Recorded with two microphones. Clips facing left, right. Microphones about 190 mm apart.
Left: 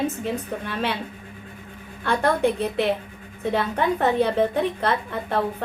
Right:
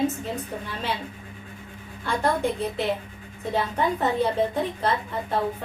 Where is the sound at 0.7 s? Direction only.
65° left (ahead or behind).